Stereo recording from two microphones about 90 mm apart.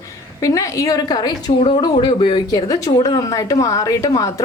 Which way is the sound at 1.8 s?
60° left (ahead or behind).